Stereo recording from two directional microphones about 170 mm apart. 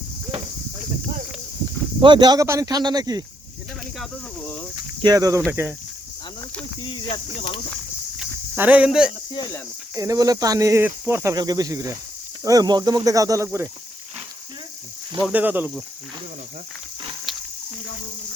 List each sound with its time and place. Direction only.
2.0 s speech: 25° right (ahead or behind)
3.9 s speech: centre (ahead or behind)
5.0 s speech: 20° right (ahead or behind)
6.8 s speech: 30° left (ahead or behind)
8.2 s cricket: 10° right (ahead or behind)
9.3 s speech: 25° left (ahead or behind)
9.9 s speech: 20° right (ahead or behind)
15.3 s speech: 10° right (ahead or behind)